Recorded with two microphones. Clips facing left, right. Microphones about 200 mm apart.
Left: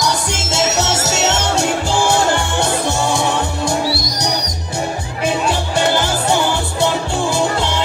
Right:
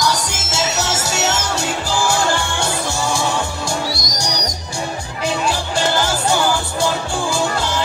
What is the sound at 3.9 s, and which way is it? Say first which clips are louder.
Music: left 3 dB; 45° right (ahead or behind).